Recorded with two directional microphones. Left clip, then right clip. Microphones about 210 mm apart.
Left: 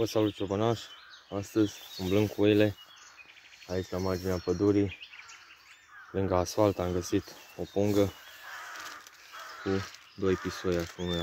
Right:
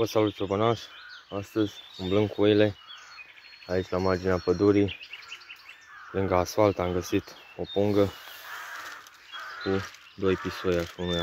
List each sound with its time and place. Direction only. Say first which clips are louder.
0.0 s speech: right 3 dB; centre (ahead or behind)
1.3 s speech: even; 15° left (ahead or behind)
3.6 s speech: right 6 dB; 10° right (ahead or behind)
6.1 s speech: right 3 dB; 5° left (ahead or behind)
9.6 s a sound: right 3 dB; 20° left (ahead or behind)
10.2 s speech: right 3 dB; centre (ahead or behind)